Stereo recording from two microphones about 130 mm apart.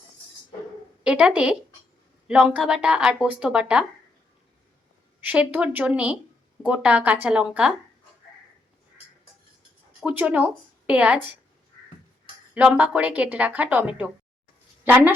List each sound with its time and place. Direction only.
1.0 s speech: 10° right (ahead or behind)
5.2 s speech: 15° right (ahead or behind)
10.0 s speech: 10° right (ahead or behind)
12.5 s a woman's voice: 10° right (ahead or behind)